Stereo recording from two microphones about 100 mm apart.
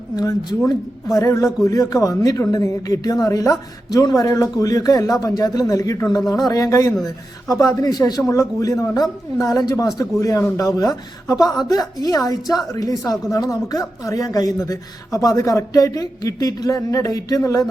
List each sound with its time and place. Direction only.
0.2 s speech: 40° left (ahead or behind)